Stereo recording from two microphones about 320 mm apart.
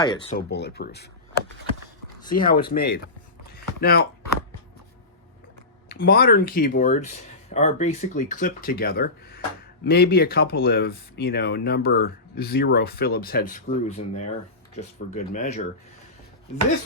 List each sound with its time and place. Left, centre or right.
0.0 s speech: centre
0.3 s speech: left
2.3 s speech: left
5.9 s speech: left